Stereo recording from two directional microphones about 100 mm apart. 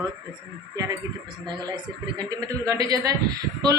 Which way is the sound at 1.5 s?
45° right (ahead or behind).